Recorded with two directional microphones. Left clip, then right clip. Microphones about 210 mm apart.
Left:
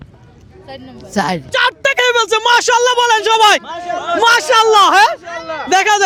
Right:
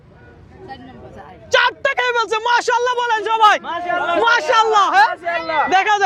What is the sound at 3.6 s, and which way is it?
Speech, 15° right (ahead or behind).